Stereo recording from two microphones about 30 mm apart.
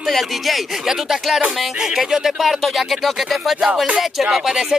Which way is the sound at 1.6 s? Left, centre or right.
Centre.